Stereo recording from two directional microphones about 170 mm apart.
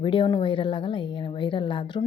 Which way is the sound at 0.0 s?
30° left (ahead or behind).